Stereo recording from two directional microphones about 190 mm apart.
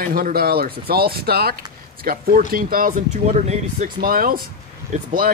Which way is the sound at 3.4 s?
35° right (ahead or behind).